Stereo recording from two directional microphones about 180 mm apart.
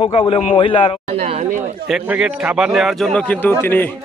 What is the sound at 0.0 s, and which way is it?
Speech, 30° left (ahead or behind).